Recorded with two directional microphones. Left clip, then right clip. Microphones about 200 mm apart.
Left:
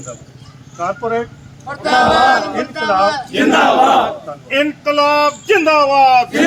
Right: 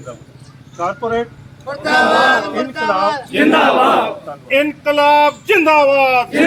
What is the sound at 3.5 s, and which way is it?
Battle cry, 40° right (ahead or behind).